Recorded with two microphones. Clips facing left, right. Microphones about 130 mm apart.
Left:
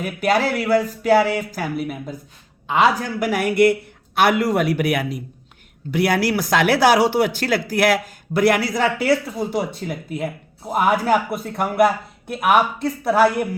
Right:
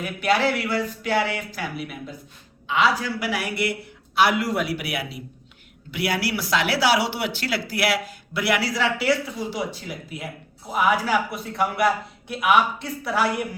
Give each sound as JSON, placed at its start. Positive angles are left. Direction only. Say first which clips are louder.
{"t": 0.0, "sound": "speech", "louder": "left 2 dB", "side_deg": 45}
{"t": 10.7, "sound": "speech", "louder": "left 4 dB", "side_deg": 50}